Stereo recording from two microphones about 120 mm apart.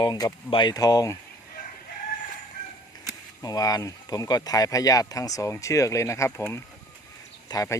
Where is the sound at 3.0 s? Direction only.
30° left (ahead or behind).